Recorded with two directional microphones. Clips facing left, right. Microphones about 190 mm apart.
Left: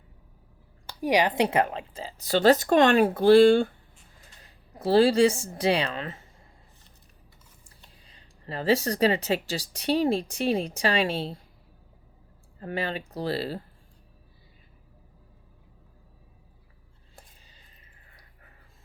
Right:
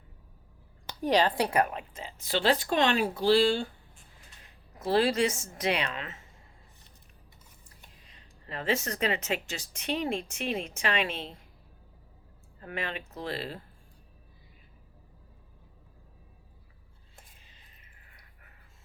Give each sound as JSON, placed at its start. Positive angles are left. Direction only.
{"t": 1.0, "sound": "a woman's voice", "side_deg": 15}
{"t": 4.4, "sound": "a woman's voice", "side_deg": 30}
{"t": 7.9, "sound": "speech", "side_deg": 30}
{"t": 12.5, "sound": "speech", "side_deg": 30}